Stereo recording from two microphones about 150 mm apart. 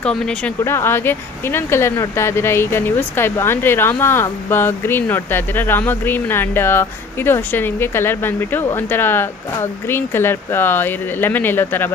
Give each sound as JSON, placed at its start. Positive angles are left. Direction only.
{"t": 0.0, "sound": "speech", "side_deg": 5}
{"t": 0.7, "sound": "speech", "side_deg": 15}